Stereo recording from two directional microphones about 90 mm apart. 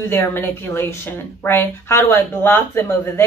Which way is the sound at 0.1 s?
25° left (ahead or behind).